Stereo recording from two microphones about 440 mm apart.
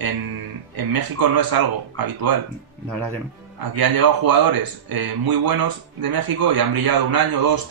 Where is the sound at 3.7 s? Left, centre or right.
Right.